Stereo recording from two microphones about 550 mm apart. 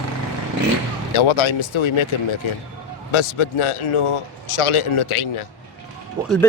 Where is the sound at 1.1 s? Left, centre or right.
Left.